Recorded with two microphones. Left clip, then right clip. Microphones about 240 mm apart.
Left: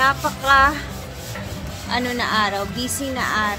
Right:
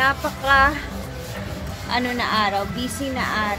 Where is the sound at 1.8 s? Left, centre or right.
Centre.